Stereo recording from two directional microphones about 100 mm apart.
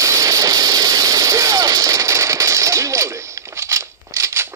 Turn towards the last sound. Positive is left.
turn(degrees=-30)  # may be behind; listen again after turning